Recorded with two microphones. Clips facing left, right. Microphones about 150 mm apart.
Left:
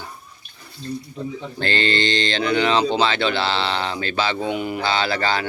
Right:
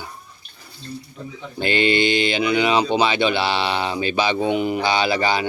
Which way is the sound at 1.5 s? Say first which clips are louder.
Right 4 dB; 15° right (ahead or behind).